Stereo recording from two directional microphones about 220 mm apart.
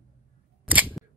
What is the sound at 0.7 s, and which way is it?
Camera, 5° right (ahead or behind).